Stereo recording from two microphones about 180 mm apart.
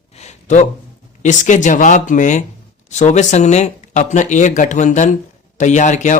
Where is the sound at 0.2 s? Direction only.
40° left (ahead or behind).